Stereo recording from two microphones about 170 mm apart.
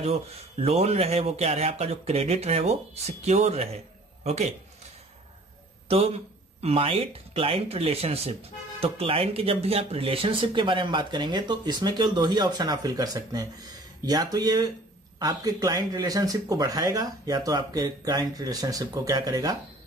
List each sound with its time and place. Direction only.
0.0 s a man's voice: 40° right (ahead or behind)
5.9 s speech: 35° right (ahead or behind)